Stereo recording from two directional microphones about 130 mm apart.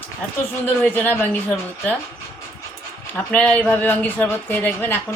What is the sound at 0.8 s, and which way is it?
Speech, 15° left (ahead or behind).